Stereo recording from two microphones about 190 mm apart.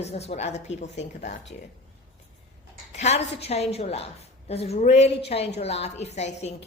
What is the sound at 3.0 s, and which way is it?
A woman's voice, 35° left (ahead or behind).